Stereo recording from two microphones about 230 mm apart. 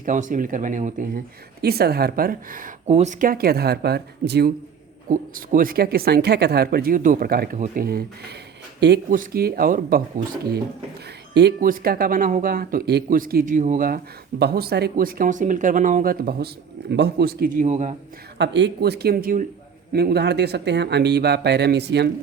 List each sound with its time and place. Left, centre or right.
0.0 s speech: right
9.0 s speech: right
11.3 s speech: right
18.3 s speech: right